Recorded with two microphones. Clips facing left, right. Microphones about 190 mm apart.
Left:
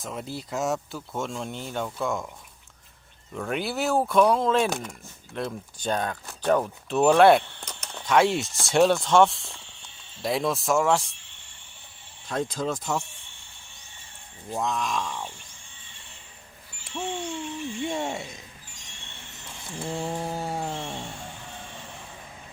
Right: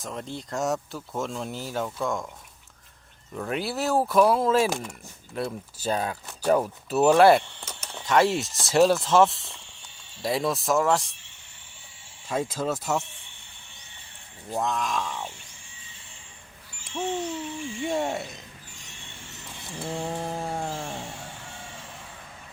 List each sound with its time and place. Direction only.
0.0 s speech: 5° left (ahead or behind)
3.3 s speech: centre (ahead or behind)
12.3 s speech: 5° right (ahead or behind)
14.5 s speech: centre (ahead or behind)
16.8 s speech: centre (ahead or behind)
19.8 s speech: centre (ahead or behind)